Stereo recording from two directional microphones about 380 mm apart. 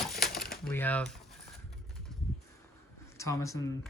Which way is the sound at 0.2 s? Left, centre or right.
Centre.